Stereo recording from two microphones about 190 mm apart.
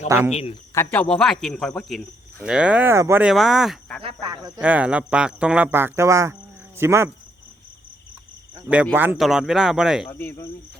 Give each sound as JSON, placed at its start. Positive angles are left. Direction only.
{"t": 0.3, "sound": "speech", "side_deg": 35}
{"t": 0.7, "sound": "speech", "side_deg": 10}
{"t": 4.0, "sound": "speech", "side_deg": -20}
{"t": 4.6, "sound": "speech", "side_deg": -5}
{"t": 9.0, "sound": "speech", "side_deg": -5}
{"t": 10.1, "sound": "cricket", "side_deg": 10}